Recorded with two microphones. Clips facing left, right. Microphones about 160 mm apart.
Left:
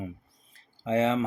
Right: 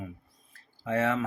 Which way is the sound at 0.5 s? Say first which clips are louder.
Left 3 dB; 20° left (ahead or behind).